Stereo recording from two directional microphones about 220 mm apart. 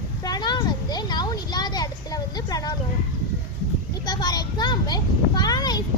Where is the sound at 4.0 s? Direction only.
20° left (ahead or behind).